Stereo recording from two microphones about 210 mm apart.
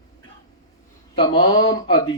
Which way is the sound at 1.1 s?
20° left (ahead or behind).